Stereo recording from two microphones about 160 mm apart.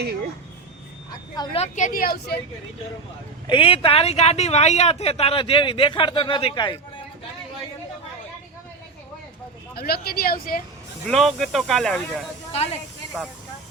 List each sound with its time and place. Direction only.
1.5 s a woman's voice: 45° left (ahead or behind); by 2.4 s 80° left
3.4 s speech: 30° left (ahead or behind)
9.7 s speech: 70° left (ahead or behind)
11.0 s speech: centre (ahead or behind)
12.5 s speech: 40° left (ahead or behind)